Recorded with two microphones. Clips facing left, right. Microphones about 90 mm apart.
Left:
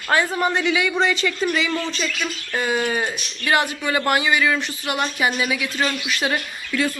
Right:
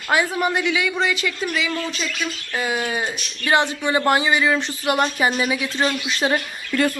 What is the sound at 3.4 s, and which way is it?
Speech, 25° right (ahead or behind).